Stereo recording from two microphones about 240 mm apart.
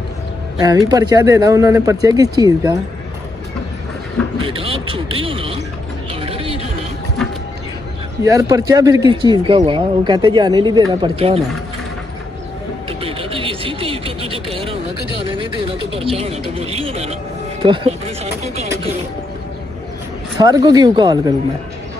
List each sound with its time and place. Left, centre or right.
0.6 s speech: centre
4.4 s speech: right
6.2 s a sound: right
8.2 s speech: centre
13.0 s vehicle: right
15.9 s a sound: right
20.3 s speech: centre